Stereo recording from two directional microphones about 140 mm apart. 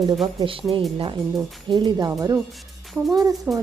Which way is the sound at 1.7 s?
30° right (ahead or behind).